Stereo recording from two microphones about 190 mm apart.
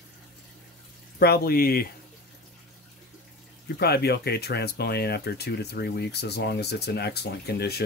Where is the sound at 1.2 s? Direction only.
55° left (ahead or behind).